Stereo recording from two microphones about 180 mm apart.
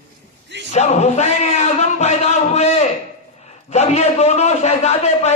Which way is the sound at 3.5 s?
35° left (ahead or behind).